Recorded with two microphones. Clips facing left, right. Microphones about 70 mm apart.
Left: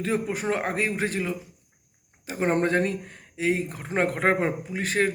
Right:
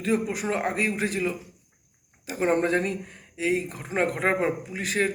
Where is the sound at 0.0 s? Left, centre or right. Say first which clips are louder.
Right 1 dB; left.